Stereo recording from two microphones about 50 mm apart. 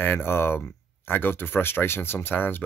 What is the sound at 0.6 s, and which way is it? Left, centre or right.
Speech, left.